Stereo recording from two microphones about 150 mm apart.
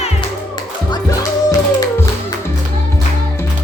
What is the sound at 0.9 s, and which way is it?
Music, 25° left (ahead or behind).